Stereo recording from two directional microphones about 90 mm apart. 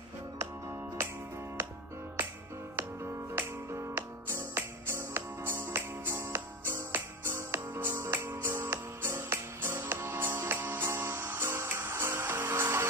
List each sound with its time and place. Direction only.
2.7 s music: 30° right (ahead or behind)